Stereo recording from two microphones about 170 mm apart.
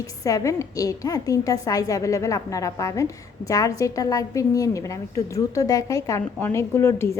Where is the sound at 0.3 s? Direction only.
20° left (ahead or behind).